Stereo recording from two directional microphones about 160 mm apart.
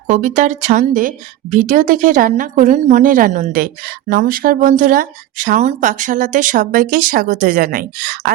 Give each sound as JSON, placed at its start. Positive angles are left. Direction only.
{"t": 0.1, "sound": "a woman's voice", "side_deg": -50}